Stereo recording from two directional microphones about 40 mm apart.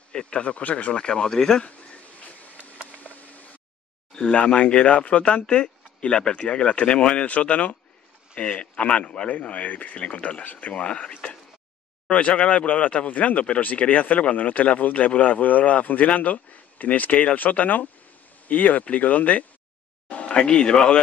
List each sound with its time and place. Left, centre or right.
0.1 s speech: left
0.9 s speech: left
1.6 s a sound: left
4.1 s a sound: centre
4.4 s speech: left
20.1 s speech: left